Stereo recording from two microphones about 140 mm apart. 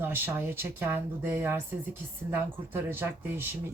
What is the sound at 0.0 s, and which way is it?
Speech, 15° right (ahead or behind).